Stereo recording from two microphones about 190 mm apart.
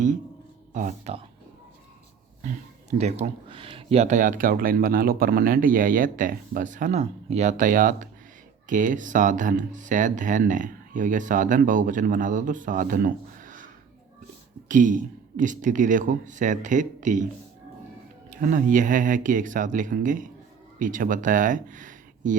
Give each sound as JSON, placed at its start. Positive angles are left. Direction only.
{"t": 0.7, "sound": "speech", "side_deg": -40}
{"t": 3.0, "sound": "speech", "side_deg": -35}
{"t": 14.7, "sound": "speech", "side_deg": -45}
{"t": 18.3, "sound": "speech", "side_deg": -45}